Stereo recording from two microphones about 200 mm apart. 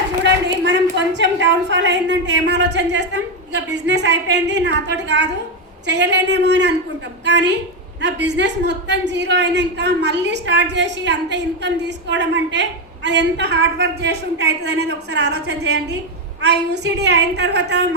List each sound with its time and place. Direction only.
0.4 s a woman's voice: 60° right (ahead or behind)